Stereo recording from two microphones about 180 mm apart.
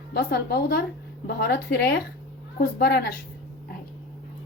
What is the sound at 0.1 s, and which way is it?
A woman's voice, 60° left (ahead or behind).